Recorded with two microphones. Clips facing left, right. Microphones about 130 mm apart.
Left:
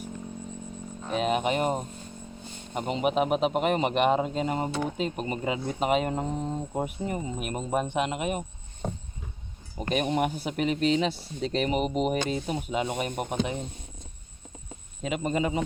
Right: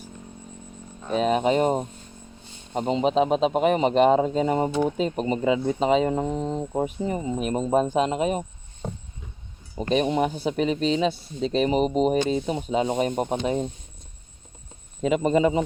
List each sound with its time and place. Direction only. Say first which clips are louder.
1.1 s speech: right 5 dB; 35° right (ahead or behind)
9.9 s speech: right 4 dB; 25° right (ahead or behind)
15.0 s speech: right 7 dB; 35° right (ahead or behind)